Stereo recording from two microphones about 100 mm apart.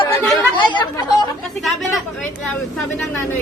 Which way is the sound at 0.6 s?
50° left (ahead or behind).